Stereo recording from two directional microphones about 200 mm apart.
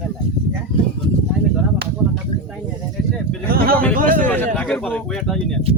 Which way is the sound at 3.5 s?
45° right (ahead or behind).